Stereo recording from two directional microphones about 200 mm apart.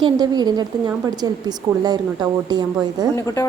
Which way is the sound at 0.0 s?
20° right (ahead or behind).